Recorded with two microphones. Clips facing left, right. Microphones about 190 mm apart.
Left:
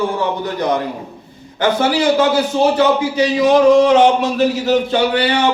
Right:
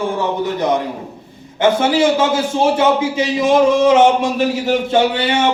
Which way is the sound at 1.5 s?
25° right (ahead or behind).